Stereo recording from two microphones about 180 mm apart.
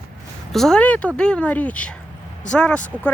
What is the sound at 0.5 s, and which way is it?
Speech, 5° left (ahead or behind).